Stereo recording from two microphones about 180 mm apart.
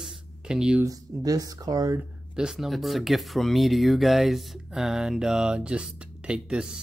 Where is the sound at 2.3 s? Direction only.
5° right (ahead or behind).